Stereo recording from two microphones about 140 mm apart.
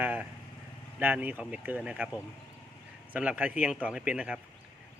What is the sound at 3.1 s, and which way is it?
Speech, 10° right (ahead or behind).